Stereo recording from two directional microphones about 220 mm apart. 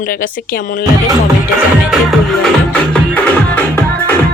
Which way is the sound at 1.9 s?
Centre (ahead or behind).